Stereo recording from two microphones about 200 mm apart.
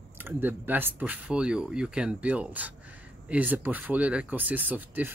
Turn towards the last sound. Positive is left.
turn(degrees=-10)  # may be behind; listen again after turning